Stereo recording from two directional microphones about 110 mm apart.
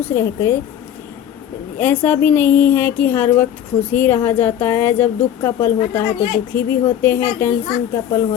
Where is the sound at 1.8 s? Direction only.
20° left (ahead or behind).